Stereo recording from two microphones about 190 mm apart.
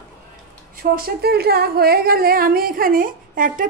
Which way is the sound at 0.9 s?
55° right (ahead or behind).